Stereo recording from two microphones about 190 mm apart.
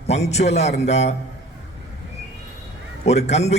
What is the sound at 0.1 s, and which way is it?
A man's voice, 35° left (ahead or behind).